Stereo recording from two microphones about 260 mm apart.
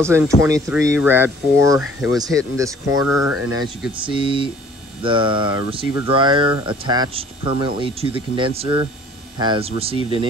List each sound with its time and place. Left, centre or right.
0.0 s speech: centre
4.0 s speech: centre